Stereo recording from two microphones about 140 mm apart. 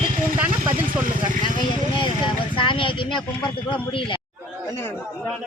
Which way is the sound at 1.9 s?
35° left (ahead or behind).